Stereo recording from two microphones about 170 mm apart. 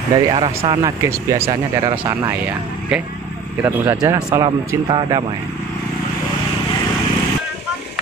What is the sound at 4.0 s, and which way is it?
Speech, 20° right (ahead or behind).